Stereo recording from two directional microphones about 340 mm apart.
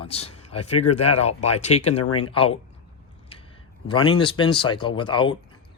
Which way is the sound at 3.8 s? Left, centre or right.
Centre.